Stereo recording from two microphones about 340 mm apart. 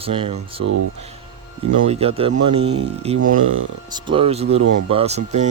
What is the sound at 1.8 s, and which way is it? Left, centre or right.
Speech, centre.